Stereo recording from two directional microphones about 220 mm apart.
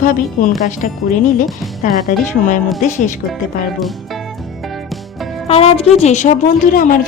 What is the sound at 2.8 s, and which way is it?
Speech, 35° left (ahead or behind).